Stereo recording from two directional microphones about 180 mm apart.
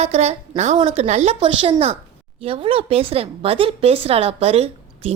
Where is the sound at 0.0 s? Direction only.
35° right (ahead or behind).